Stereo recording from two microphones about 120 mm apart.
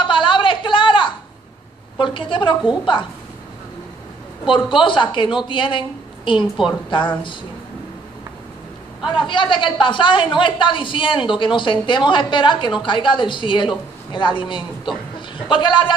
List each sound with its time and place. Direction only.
0.0 s a sound: 45° left (ahead or behind)
2.0 s a woman's voice: 45° left (ahead or behind)
4.6 s a woman's voice: 45° left (ahead or behind)
9.3 s a woman's voice: 40° left (ahead or behind)
15.1 s chuckle: 40° left (ahead or behind)